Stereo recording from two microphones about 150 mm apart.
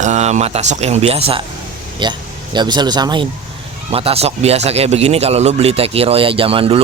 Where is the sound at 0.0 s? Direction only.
50° right (ahead or behind); by 3.2 s 30° right (ahead or behind).